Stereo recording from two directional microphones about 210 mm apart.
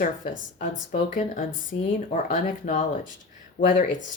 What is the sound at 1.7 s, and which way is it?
Speech, 55° left (ahead or behind).